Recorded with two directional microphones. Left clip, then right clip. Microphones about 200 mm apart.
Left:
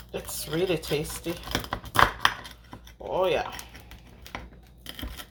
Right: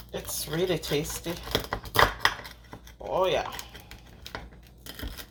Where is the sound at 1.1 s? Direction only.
10° right (ahead or behind).